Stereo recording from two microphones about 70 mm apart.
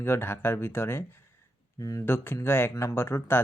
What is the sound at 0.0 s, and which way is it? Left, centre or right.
Speech, left.